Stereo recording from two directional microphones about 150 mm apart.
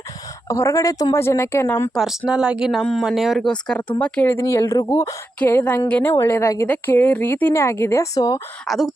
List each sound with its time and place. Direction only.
0.4 s a woman's voice: 20° left (ahead or behind)
2.0 s a woman's voice: 5° right (ahead or behind); by 8.4 s 25° left (ahead or behind)
8.6 s speech: centre (ahead or behind)